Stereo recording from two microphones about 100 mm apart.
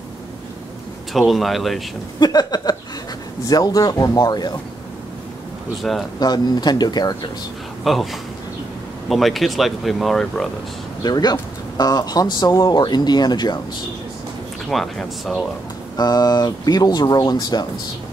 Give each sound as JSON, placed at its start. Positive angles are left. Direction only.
{"t": 1.1, "sound": "speech", "side_deg": 0}
{"t": 2.1, "sound": "speech", "side_deg": 45}
{"t": 5.8, "sound": "speech", "side_deg": 0}
{"t": 6.1, "sound": "speech", "side_deg": 45}
{"t": 7.8, "sound": "speech", "side_deg": 0}
{"t": 11.0, "sound": "speech", "side_deg": 40}
{"t": 14.7, "sound": "speech", "side_deg": 0}
{"t": 16.0, "sound": "speech", "side_deg": 40}